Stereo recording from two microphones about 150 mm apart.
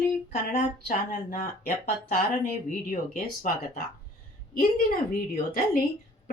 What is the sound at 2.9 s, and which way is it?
Speech, 65° left (ahead or behind).